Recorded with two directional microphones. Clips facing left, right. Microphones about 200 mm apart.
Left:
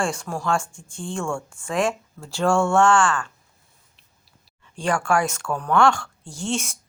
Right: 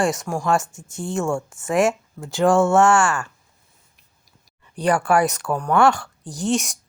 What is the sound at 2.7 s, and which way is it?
Speech, 5° right (ahead or behind).